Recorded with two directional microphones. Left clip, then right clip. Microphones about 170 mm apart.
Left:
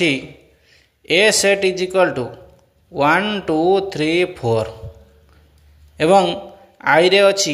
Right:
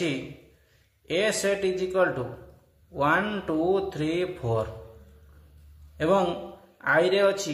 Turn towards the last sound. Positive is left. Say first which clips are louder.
# left 9 dB
turn(degrees=30)  # may be behind; listen again after turning